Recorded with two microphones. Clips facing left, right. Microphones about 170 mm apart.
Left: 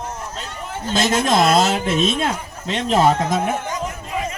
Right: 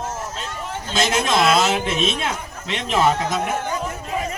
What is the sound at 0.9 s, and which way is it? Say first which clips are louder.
Speech: left 3 dB; 50° left (ahead or behind).